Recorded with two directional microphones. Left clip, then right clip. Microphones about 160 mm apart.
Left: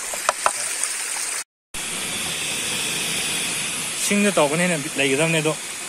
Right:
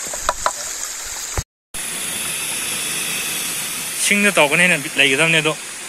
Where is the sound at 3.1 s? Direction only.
35° left (ahead or behind).